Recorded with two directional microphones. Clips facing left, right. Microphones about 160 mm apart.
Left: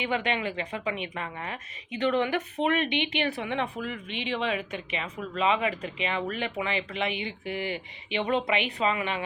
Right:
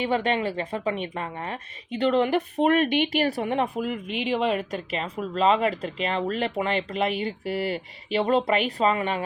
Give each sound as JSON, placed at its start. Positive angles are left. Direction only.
{"t": 0.0, "sound": "a woman's voice", "side_deg": -35}
{"t": 3.8, "sound": "speech", "side_deg": -5}
{"t": 4.2, "sound": "a woman's voice", "side_deg": -45}